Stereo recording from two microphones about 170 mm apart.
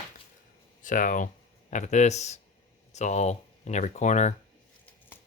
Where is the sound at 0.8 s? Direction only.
50° left (ahead or behind).